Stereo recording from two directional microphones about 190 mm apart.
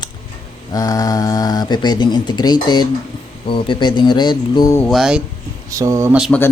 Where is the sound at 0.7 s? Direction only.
20° left (ahead or behind).